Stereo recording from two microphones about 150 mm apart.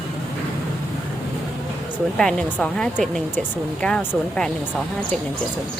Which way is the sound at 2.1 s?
5° left (ahead or behind).